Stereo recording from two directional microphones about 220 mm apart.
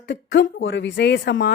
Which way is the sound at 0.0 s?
55° left (ahead or behind).